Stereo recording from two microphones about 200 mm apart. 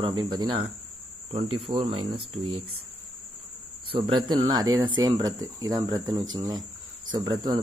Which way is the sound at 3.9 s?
25° right (ahead or behind).